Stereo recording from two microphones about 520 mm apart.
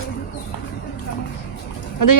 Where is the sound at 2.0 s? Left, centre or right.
Left.